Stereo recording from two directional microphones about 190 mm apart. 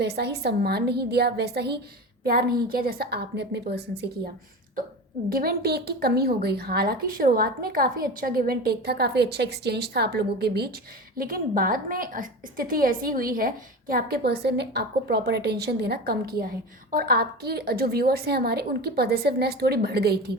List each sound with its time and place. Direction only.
0.0 s a woman's voice: 60° right (ahead or behind)
5.3 s a woman's voice: 50° right (ahead or behind)